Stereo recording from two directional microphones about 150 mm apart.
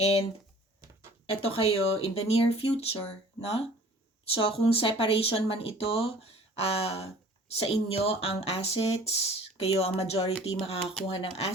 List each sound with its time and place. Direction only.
1.3 s speech: 40° left (ahead or behind)